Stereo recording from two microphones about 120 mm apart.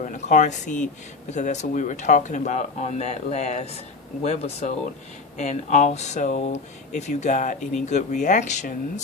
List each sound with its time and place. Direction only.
0.0 s speech: 90° left
1.3 s speech: 75° left (ahead or behind)
5.4 s speech: 80° left